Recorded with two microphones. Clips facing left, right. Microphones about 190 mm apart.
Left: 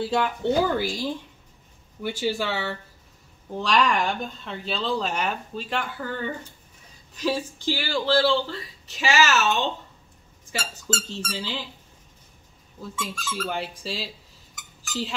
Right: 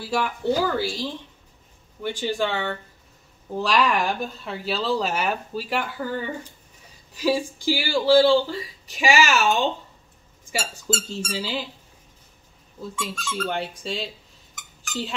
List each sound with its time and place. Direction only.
0.0 s speech: 20° left (ahead or behind); by 11.6 s 10° right (ahead or behind)
12.9 s speech: centre (ahead or behind)